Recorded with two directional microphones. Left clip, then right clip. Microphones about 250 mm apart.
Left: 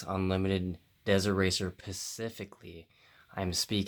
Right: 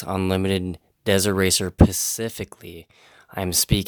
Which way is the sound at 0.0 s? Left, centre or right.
Right.